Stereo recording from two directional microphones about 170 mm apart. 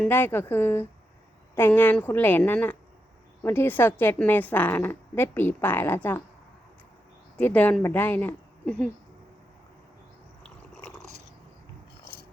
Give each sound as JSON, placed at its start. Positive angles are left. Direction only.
{"t": 0.0, "sound": "a woman's voice", "side_deg": 10}
{"t": 7.3, "sound": "speech", "side_deg": 10}